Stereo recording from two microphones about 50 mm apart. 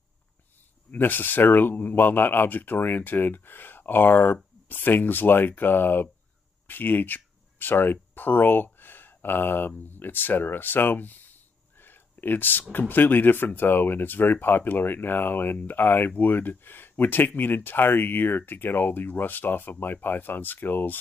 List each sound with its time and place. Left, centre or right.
0.9 s speech: left
11.8 s a sound: left
12.7 s speech: left